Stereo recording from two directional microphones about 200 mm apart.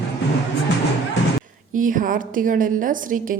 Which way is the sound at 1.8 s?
40° right (ahead or behind).